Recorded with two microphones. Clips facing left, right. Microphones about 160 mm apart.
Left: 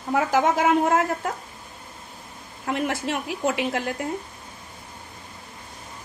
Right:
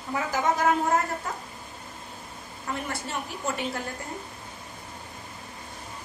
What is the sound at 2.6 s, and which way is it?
A woman's voice, 75° left (ahead or behind).